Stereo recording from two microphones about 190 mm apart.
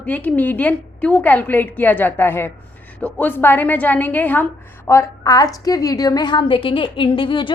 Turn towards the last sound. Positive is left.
turn(degrees=25)  # may be behind; listen again after turning